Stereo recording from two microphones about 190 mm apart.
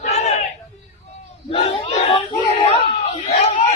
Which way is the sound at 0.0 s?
35° left (ahead or behind).